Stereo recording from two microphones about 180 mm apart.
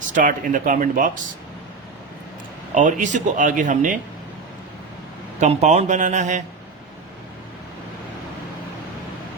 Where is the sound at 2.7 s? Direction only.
45° right (ahead or behind).